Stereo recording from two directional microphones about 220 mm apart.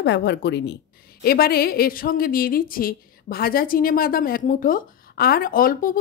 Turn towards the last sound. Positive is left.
turn(degrees=40)  # may be behind; listen again after turning